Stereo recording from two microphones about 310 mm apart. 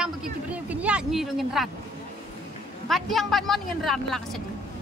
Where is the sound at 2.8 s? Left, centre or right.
Centre.